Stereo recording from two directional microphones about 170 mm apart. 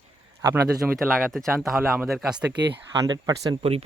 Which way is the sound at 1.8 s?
10° right (ahead or behind).